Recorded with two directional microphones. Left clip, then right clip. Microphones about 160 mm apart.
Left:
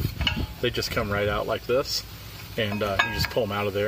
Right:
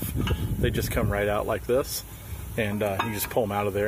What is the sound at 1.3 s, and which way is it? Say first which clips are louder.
Speech: even; 5° right (ahead or behind).